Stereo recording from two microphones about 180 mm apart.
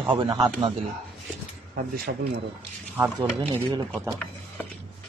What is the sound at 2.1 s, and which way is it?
Speech, 65° right (ahead or behind).